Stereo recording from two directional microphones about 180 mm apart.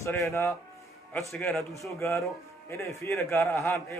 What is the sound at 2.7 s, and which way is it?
A man's voice, 15° left (ahead or behind).